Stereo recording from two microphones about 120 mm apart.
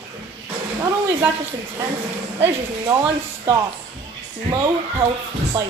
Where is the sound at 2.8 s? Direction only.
30° right (ahead or behind).